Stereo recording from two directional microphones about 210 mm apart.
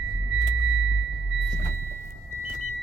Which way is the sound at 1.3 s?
Centre (ahead or behind).